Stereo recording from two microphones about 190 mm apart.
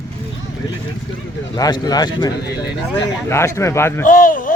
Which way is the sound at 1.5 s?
20° left (ahead or behind).